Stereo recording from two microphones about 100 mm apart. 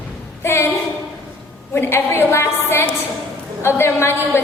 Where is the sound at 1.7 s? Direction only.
25° left (ahead or behind).